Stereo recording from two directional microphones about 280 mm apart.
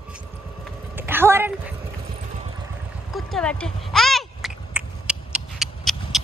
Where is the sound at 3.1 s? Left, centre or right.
Centre.